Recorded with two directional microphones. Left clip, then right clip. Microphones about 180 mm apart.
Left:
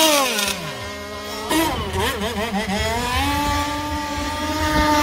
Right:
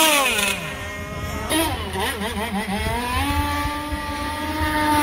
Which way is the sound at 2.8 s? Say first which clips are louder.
Left 2 dB; 55° right (ahead or behind).